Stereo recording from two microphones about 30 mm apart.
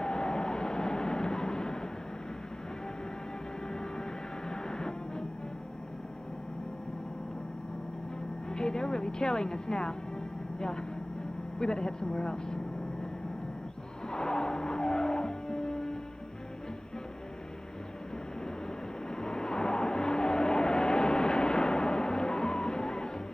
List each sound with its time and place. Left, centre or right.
0.0 s vehicle: left
4.5 s music: left
8.5 s speech: left
14.1 s skidding: left
19.1 s vehicle: left